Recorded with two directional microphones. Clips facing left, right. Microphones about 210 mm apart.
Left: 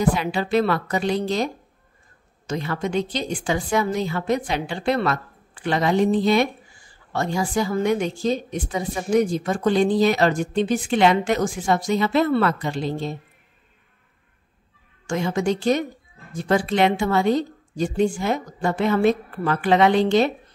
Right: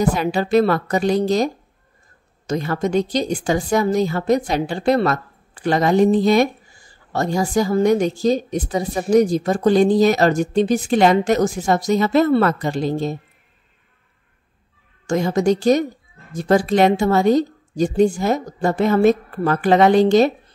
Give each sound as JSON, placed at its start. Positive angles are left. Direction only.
{"t": 0.0, "sound": "a woman's voice", "side_deg": -45}
{"t": 15.0, "sound": "a woman's voice", "side_deg": -40}